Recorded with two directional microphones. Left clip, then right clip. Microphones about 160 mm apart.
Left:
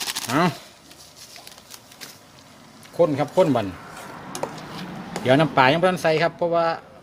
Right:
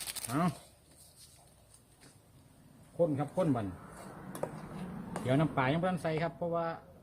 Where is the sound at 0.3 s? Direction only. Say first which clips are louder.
Left 13 dB; 45° left (ahead or behind).